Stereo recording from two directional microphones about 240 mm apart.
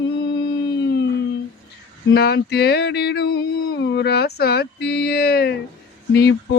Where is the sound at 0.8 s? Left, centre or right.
Left.